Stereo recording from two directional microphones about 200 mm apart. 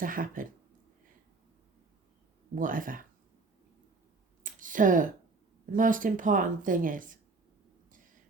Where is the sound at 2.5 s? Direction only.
45° right (ahead or behind).